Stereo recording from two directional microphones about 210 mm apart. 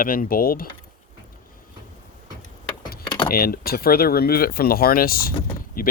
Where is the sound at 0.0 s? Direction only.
40° left (ahead or behind).